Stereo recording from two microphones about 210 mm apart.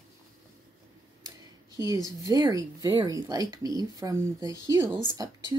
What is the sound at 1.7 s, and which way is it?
A woman's voice, 15° right (ahead or behind).